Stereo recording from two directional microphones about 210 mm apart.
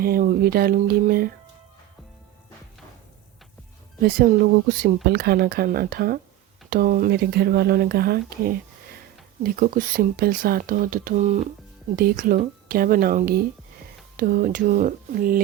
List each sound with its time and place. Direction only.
0.0 s speech: 45° right (ahead or behind)
4.0 s speech: 45° right (ahead or behind)